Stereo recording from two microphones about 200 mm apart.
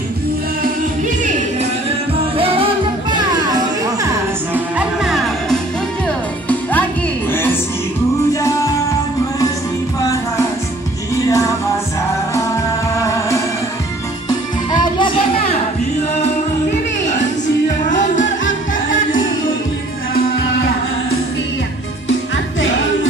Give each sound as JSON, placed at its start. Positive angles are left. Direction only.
{"t": 2.3, "sound": "music", "side_deg": -30}
{"t": 4.7, "sound": "music", "side_deg": 0}
{"t": 8.3, "sound": "music", "side_deg": 15}
{"t": 11.2, "sound": "music", "side_deg": 15}
{"t": 12.9, "sound": "music", "side_deg": 15}
{"t": 17.8, "sound": "music", "side_deg": 40}